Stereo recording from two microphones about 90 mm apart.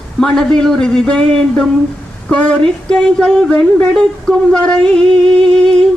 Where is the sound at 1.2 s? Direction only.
90° right.